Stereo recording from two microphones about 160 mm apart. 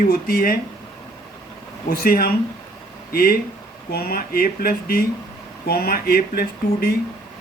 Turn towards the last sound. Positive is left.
turn(degrees=70)  # may be behind; listen again after turning